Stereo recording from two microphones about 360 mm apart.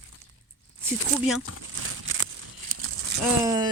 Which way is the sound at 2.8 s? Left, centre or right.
Right.